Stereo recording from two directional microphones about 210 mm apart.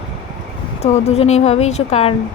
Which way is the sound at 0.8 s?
30° left (ahead or behind).